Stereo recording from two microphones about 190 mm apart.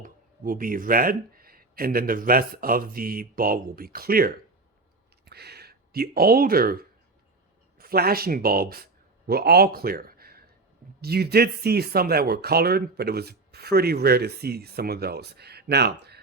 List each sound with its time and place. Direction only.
0.0 s a man's voice: 50° right (ahead or behind)